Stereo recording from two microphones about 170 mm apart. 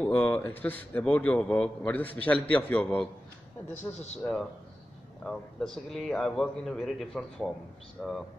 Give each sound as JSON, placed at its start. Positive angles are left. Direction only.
{"t": 0.0, "sound": "a man's voice", "side_deg": 10}
{"t": 3.7, "sound": "a man's voice", "side_deg": 40}
{"t": 4.2, "sound": "a man's voice", "side_deg": 0}